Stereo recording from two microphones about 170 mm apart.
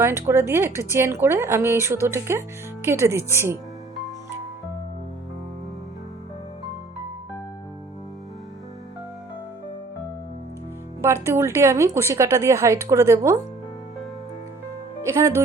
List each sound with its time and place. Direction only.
0.0 s a woman's voice: 15° right (ahead or behind)
11.0 s a woman's voice: 15° right (ahead or behind)
15.0 s a woman's voice: 15° right (ahead or behind)